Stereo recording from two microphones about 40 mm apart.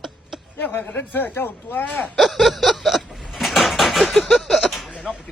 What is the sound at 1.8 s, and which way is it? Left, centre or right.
Speech, left.